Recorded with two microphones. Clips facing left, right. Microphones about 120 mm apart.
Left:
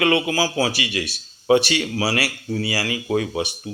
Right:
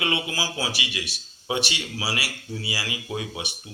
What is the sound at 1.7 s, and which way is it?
Speech, 45° left (ahead or behind).